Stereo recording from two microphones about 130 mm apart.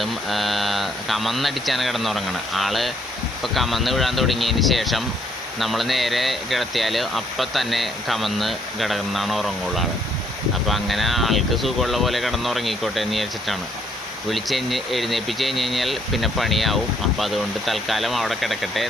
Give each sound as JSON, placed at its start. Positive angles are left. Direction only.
{"t": 0.0, "sound": "speech", "side_deg": 0}